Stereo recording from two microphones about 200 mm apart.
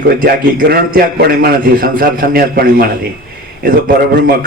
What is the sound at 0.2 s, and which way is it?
A man's voice, 45° right (ahead or behind).